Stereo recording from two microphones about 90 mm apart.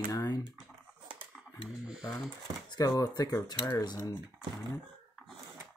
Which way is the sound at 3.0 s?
45° left (ahead or behind).